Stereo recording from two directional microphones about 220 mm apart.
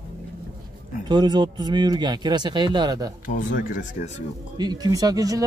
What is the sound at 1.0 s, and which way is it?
Speech, 20° right (ahead or behind).